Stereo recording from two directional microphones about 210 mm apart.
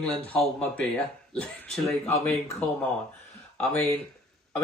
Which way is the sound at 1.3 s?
5° left (ahead or behind).